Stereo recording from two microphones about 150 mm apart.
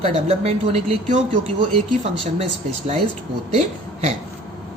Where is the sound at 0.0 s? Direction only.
45° right (ahead or behind).